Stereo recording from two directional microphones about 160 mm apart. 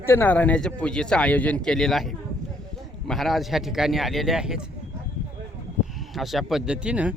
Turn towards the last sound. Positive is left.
turn(degrees=-5)  # may be behind; listen again after turning